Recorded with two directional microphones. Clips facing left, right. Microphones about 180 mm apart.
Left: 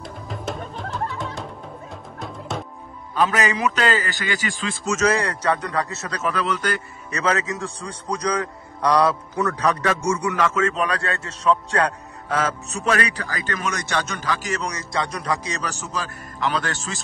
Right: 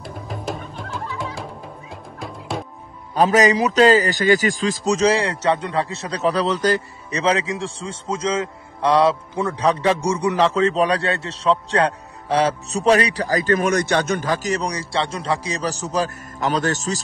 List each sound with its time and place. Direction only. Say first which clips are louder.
0.0 s music: right 1 dB; centre (ahead or behind)
3.2 s a man's voice: right 6 dB; 40° right (ahead or behind)
13.6 s a man's voice: right 7 dB; 55° right (ahead or behind)